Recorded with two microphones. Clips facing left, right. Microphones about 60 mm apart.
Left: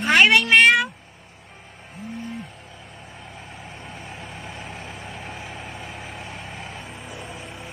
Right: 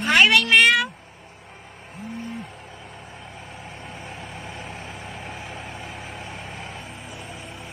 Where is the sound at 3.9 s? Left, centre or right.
Centre.